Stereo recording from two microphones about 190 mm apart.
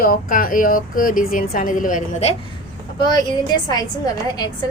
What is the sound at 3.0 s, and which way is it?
Speech, 20° left (ahead or behind).